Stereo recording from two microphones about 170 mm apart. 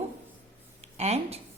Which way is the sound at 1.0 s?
40° right (ahead or behind).